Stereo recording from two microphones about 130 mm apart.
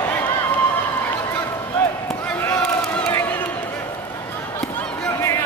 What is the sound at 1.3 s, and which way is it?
Basketball bounce, 15° left (ahead or behind).